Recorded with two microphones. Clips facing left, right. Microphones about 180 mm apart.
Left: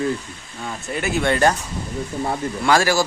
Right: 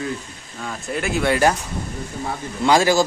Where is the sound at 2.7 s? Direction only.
15° right (ahead or behind).